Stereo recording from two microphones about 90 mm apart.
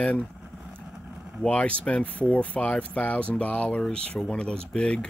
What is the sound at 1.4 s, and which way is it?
Speech, 15° left (ahead or behind).